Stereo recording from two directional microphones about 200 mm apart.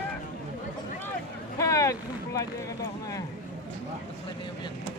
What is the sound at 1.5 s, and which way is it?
Boat, 15° left (ahead or behind).